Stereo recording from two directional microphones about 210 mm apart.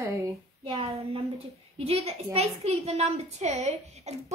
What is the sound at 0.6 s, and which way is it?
A woman's voice, 25° right (ahead or behind).